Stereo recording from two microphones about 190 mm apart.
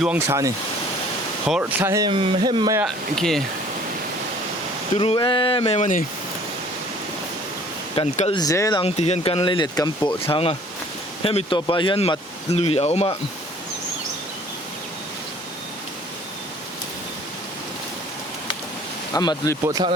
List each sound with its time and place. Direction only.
0.3 s speech: 15° right (ahead or behind)
1.5 s speech: 5° right (ahead or behind)
1.9 s speech: 20° right (ahead or behind)
2.8 s speech: centre (ahead or behind)
4.9 s speech: 25° left (ahead or behind)
7.9 s speech: 35° left (ahead or behind)
8.4 s speech: 15° left (ahead or behind)
8.8 s speech: 35° left (ahead or behind)
19.1 s speech: 20° left (ahead or behind)
19.6 s speech: 20° right (ahead or behind)